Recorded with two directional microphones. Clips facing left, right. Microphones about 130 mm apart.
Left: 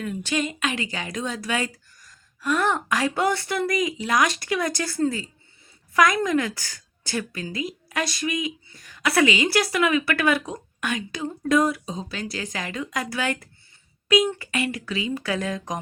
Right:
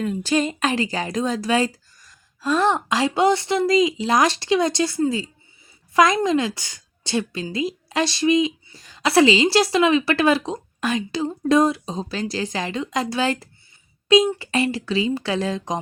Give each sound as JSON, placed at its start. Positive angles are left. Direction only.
{"t": 0.0, "sound": "a woman's voice", "side_deg": -35}